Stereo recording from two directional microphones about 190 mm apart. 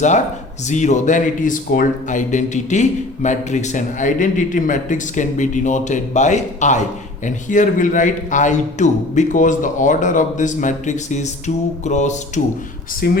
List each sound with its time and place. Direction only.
0.7 s speech: 40° left (ahead or behind)
13.0 s speech: 50° left (ahead or behind)